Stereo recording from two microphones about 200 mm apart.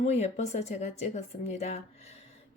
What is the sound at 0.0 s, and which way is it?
Speech, 30° left (ahead or behind).